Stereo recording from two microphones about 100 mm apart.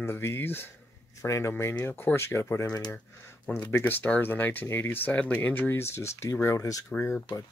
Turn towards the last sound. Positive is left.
turn(degrees=30)  # may be behind; listen again after turning